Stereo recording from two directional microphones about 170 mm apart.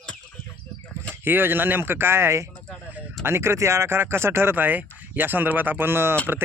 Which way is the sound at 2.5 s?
10° left (ahead or behind).